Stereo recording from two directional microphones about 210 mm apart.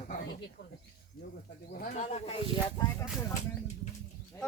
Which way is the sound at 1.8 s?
35° left (ahead or behind).